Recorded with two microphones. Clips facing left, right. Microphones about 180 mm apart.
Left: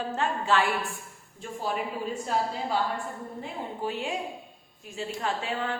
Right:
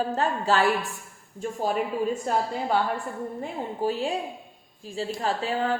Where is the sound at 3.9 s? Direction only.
35° right (ahead or behind).